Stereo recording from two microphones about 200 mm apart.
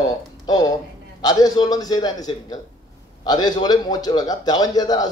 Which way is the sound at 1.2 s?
20° left (ahead or behind).